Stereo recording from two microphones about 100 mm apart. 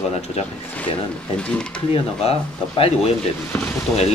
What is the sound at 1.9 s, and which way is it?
Speech, 70° left (ahead or behind).